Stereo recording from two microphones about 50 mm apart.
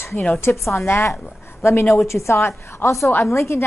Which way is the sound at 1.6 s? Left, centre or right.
Left.